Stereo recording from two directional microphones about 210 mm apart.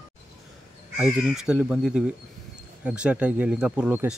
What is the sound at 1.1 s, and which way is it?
Speech, 5° right (ahead or behind).